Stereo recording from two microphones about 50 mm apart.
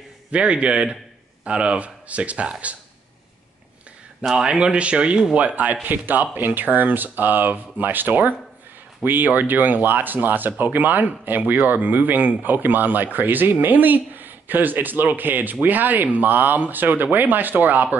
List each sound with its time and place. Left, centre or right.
0.3 s speech: right
4.3 s speech: centre; by 17.8 s right